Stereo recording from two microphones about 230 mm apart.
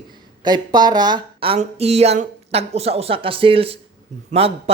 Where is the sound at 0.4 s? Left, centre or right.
Centre.